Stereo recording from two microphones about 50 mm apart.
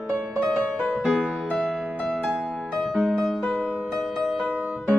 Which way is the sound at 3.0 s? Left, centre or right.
Centre.